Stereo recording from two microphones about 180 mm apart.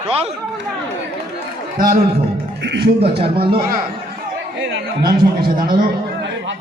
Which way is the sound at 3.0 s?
30° right (ahead or behind).